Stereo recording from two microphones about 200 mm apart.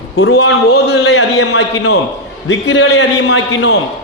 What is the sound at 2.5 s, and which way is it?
A man's voice, 70° left (ahead or behind).